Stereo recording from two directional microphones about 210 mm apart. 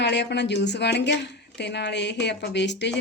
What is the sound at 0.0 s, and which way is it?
A woman's voice, 55° left (ahead or behind).